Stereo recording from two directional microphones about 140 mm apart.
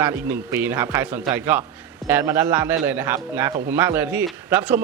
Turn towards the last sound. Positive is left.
turn(degrees=-10)  # may be behind; listen again after turning